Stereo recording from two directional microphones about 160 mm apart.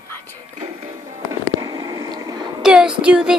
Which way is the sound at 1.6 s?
25° right (ahead or behind).